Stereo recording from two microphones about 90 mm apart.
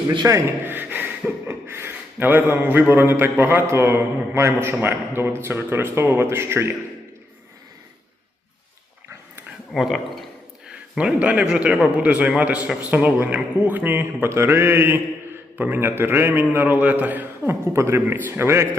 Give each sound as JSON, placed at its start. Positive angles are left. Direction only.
{"t": 0.3, "sound": "a man's voice", "side_deg": -35}
{"t": 0.6, "sound": "a sound", "side_deg": -20}
{"t": 1.5, "sound": "a man's voice", "side_deg": -25}
{"t": 9.7, "sound": "a man's voice", "side_deg": 0}
{"t": 10.7, "sound": "a man's voice", "side_deg": -10}